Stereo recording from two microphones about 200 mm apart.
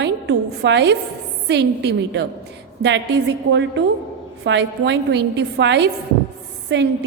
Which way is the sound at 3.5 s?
60° right (ahead or behind).